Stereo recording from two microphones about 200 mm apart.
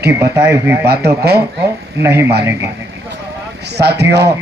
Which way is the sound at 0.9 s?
50° right (ahead or behind).